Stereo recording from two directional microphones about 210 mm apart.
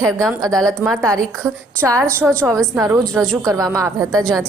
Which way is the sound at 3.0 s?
5° left (ahead or behind).